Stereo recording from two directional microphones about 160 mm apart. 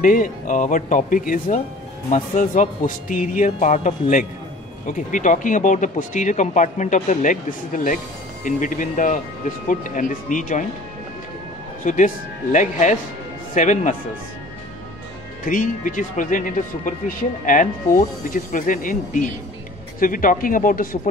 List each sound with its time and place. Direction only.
0.0 s speech: 55° left (ahead or behind)
11.8 s speech: 55° left (ahead or behind)
15.4 s speech: 55° left (ahead or behind)